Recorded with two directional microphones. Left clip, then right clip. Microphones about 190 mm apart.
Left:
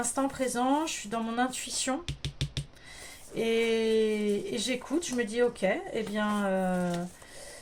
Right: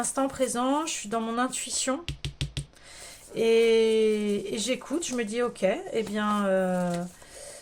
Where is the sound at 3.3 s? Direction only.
25° right (ahead or behind).